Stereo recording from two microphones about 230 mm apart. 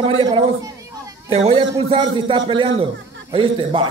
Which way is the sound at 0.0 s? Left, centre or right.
Right.